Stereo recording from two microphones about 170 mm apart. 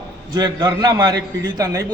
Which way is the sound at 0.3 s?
25° right (ahead or behind).